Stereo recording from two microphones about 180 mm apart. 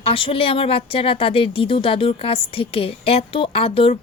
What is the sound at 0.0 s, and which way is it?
A woman's voice, 30° left (ahead or behind).